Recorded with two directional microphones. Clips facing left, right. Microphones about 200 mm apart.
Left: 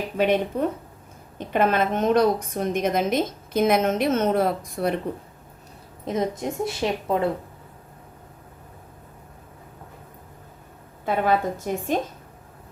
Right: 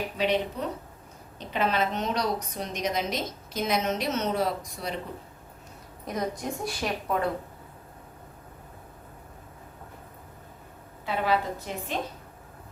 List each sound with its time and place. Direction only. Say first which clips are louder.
0.2 s a woman's voice: left 6 dB; 50° left (ahead or behind)
6.1 s a woman's voice: left 5 dB; 25° left (ahead or behind)
11.0 s a woman's voice: left 5 dB; 50° left (ahead or behind)